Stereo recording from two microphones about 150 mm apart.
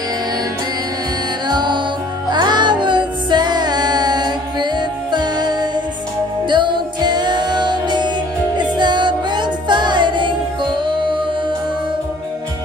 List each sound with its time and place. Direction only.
1.5 s music: 30° right (ahead or behind)